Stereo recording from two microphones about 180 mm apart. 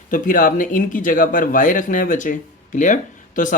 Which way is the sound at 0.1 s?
50° left (ahead or behind).